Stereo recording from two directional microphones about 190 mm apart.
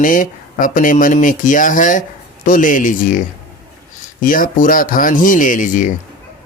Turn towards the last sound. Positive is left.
turn(degrees=45)  # may be behind; listen again after turning